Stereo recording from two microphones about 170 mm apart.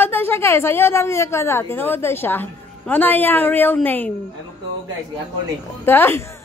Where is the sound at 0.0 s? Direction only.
15° left (ahead or behind).